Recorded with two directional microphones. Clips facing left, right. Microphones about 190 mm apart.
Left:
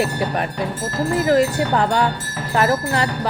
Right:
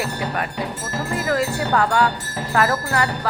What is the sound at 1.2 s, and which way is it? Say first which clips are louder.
Speech: left 5 dB; 25° left (ahead or behind).